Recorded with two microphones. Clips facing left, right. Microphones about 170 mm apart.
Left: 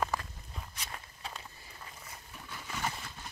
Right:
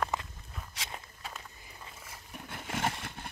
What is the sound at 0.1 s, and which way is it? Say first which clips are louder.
Walk: right 1 dB; 20° right (ahead or behind).